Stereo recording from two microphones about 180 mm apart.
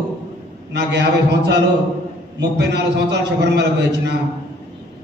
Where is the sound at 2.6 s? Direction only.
70° right (ahead or behind).